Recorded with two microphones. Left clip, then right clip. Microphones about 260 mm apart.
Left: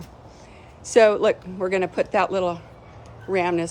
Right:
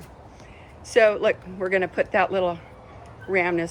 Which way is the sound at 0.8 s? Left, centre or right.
Centre.